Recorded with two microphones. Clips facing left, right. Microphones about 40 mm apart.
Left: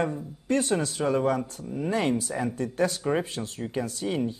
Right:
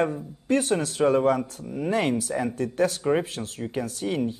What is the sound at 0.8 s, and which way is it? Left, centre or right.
Speech, right.